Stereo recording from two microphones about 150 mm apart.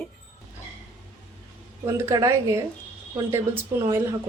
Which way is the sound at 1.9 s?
20° right (ahead or behind).